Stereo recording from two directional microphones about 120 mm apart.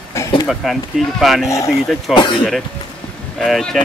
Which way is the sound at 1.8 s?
Centre (ahead or behind).